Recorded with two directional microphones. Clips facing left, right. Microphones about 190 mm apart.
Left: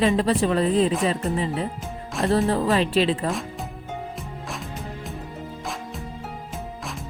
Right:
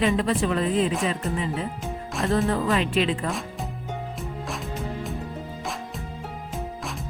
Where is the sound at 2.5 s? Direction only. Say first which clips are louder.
Left 2 dB; 35° left (ahead or behind).